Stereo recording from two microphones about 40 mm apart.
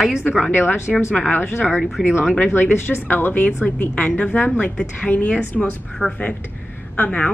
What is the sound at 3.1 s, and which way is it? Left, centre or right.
Speech, left.